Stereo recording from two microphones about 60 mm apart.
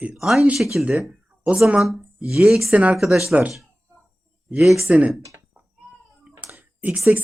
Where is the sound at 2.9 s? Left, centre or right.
Centre.